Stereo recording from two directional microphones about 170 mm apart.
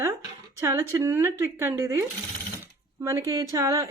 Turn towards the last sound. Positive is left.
turn(degrees=-20)  # may be behind; listen again after turning